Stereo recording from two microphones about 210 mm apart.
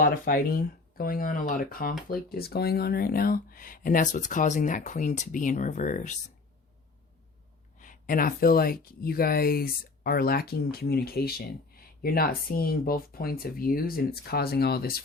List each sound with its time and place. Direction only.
0.0 s speech: 45° left (ahead or behind)
7.8 s speech: 40° left (ahead or behind)